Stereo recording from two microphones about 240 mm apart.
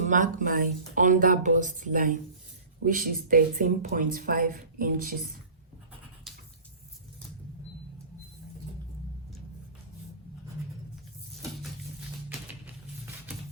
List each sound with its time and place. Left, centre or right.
0.0 s speech: right